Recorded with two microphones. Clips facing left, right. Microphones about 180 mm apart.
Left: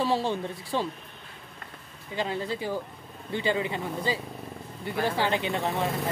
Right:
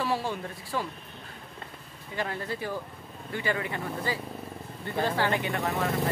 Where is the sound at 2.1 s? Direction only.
20° left (ahead or behind).